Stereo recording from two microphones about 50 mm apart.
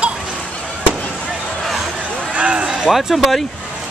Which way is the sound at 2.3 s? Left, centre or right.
Right.